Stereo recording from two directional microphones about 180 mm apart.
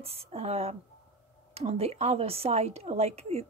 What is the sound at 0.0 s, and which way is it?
A woman's voice, 35° right (ahead or behind).